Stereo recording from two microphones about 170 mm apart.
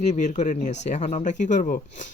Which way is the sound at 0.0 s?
45° left (ahead or behind).